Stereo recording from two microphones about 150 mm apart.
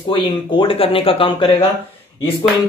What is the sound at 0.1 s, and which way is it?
Speech, 35° left (ahead or behind).